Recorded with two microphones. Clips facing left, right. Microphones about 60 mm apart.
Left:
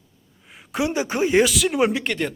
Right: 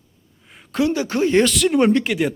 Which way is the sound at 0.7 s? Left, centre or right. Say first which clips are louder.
Right 3 dB; centre.